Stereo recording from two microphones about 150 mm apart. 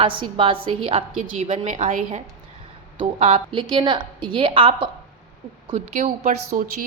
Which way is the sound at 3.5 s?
35° right (ahead or behind).